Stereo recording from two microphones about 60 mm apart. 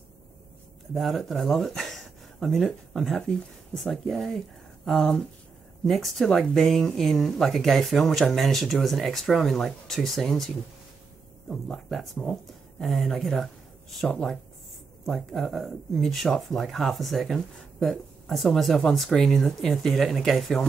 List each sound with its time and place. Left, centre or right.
0.9 s speech: centre
11.7 s speech: centre
15.0 s speech: centre